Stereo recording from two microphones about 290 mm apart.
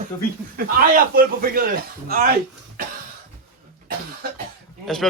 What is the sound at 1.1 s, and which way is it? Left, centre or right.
Speech, right.